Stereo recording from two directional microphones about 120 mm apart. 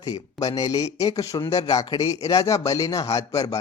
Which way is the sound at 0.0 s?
30° left (ahead or behind).